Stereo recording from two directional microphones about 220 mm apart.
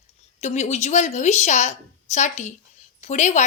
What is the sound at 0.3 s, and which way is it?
A woman's voice, 30° left (ahead or behind).